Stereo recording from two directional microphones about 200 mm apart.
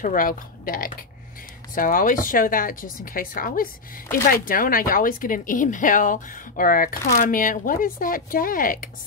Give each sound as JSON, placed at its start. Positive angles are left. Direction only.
{"t": 0.0, "sound": "speech", "side_deg": 45}